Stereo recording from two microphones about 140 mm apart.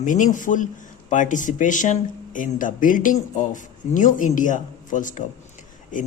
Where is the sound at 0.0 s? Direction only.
65° left (ahead or behind).